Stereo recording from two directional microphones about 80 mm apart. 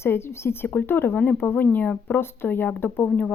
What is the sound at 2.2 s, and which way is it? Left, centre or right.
Speech, left.